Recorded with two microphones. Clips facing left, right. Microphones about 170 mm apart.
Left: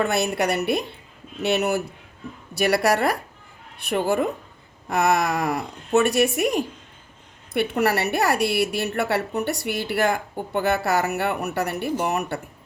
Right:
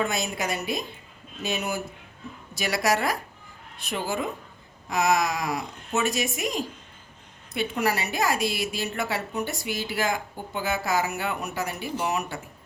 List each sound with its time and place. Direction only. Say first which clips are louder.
0.0 s a woman's voice: left 6 dB; 65° left (ahead or behind)